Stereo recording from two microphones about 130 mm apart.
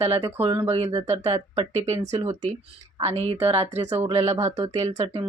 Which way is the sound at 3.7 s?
60° right (ahead or behind).